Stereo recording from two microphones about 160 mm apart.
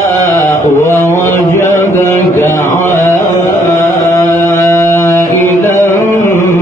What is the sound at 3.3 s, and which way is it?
Carnatic music, 55° left (ahead or behind).